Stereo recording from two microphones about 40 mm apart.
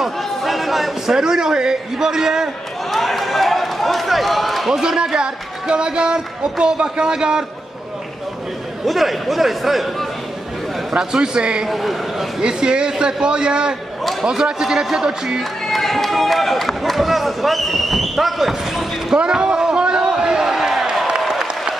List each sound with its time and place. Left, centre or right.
0.2 s chatter: centre
1.1 s a man's voice: centre
2.9 s speech: centre
4.6 s speech: centre
8.8 s a man's voice: centre
10.9 s speech: centre
11.7 s a man's voice: centre
12.4 s a man's voice: right
15.6 s run: centre
19.3 s a sound: centre
20.5 s a sound: centre
21.2 s applause: centre